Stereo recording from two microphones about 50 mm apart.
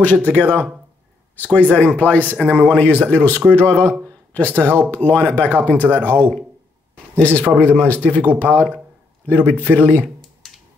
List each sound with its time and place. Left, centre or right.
0.0 s speech: left